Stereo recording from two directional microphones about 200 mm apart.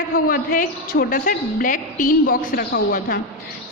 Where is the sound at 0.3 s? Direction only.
45° left (ahead or behind).